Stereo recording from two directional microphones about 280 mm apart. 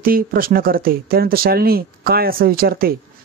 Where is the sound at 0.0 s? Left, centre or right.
Right.